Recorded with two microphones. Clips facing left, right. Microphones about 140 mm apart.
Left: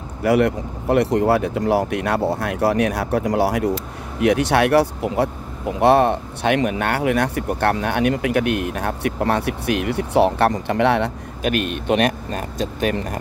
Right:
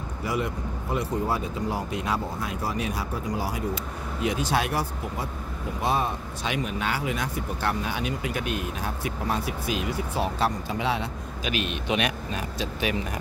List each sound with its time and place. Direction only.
0.2 s speech: 70° left (ahead or behind); by 13.2 s 45° left (ahead or behind)